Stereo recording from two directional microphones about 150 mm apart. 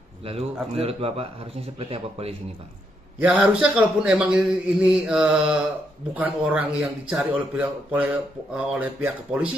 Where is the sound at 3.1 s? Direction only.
10° right (ahead or behind).